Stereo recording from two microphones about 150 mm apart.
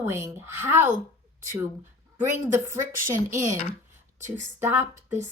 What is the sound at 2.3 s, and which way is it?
Speech, 20° right (ahead or behind).